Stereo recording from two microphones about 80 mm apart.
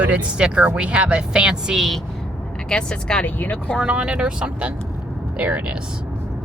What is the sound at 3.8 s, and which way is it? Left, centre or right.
Speech, centre.